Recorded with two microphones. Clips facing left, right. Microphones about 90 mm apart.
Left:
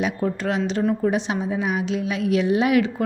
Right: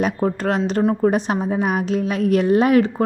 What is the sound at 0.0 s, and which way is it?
A woman's voice, 45° right (ahead or behind).